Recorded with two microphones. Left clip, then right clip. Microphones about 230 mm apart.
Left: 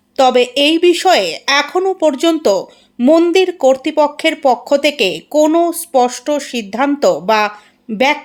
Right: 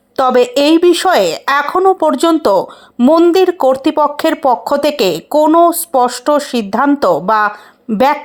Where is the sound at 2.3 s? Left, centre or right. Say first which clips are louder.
Right 3 dB; centre.